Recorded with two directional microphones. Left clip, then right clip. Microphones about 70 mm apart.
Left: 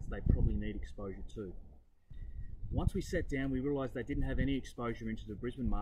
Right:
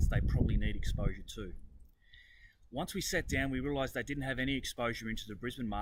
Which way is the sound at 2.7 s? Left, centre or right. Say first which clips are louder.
Right 2 dB; centre.